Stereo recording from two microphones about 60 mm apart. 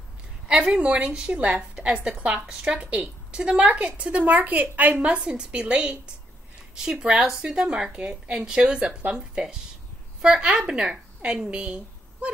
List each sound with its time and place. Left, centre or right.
0.5 s a woman's voice: centre